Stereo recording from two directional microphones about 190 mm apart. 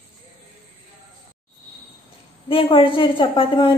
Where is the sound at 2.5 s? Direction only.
30° left (ahead or behind).